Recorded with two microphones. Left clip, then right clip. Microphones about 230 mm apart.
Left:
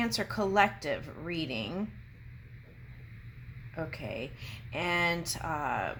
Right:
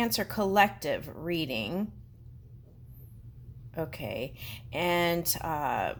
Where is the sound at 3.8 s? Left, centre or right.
Right.